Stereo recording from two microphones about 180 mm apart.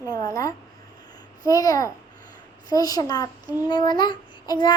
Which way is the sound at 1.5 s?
20° left (ahead or behind).